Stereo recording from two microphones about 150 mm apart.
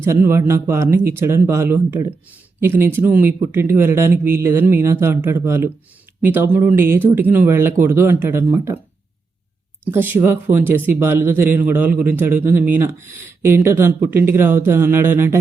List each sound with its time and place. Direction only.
0.0 s speech: 15° right (ahead or behind)
9.9 s speech: 15° right (ahead or behind)